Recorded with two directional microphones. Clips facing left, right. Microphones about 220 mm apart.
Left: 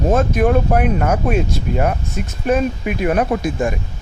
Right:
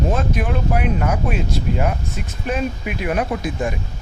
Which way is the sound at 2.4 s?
45° left (ahead or behind).